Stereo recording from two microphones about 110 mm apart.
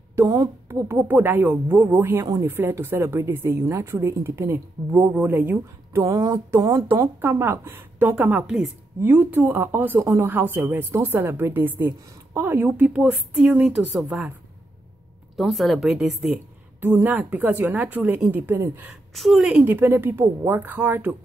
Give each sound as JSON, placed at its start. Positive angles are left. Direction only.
{"t": 0.7, "sound": "speech", "side_deg": -20}
{"t": 7.2, "sound": "a woman's voice", "side_deg": -20}
{"t": 15.3, "sound": "a woman's voice", "side_deg": 0}
{"t": 16.8, "sound": "a woman's voice", "side_deg": -15}
{"t": 19.1, "sound": "a woman's voice", "side_deg": 0}
{"t": 19.5, "sound": "speech", "side_deg": -20}